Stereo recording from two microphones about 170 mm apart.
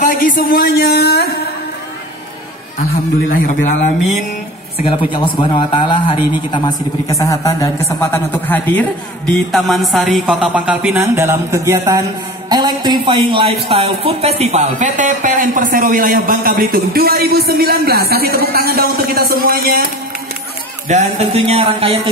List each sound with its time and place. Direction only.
0.0 s a man's voice: 55° left (ahead or behind)
3.3 s a man's voice: 45° left (ahead or behind)
4.9 s a man's voice: 30° left (ahead or behind); by 19.8 s 65° right (ahead or behind)
20.9 s speech: 40° right (ahead or behind)